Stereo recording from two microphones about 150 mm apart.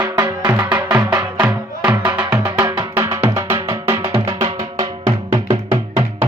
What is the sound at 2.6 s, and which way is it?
Music, 25° right (ahead or behind).